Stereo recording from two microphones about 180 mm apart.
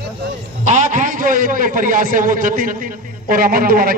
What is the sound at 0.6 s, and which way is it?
A man's voice, 45° right (ahead or behind).